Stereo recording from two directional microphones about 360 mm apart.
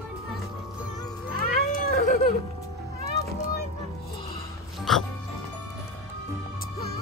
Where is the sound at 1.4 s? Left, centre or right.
Left.